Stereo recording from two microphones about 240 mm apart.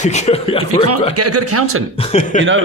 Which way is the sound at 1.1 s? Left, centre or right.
Right.